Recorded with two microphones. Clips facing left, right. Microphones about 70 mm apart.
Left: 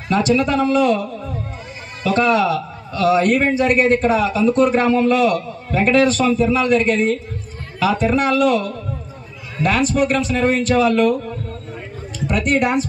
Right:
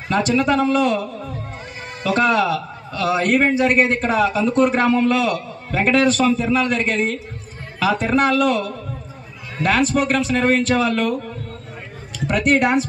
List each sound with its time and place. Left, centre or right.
0.1 s a man's voice: right
2.0 s a man's voice: right
12.3 s a man's voice: right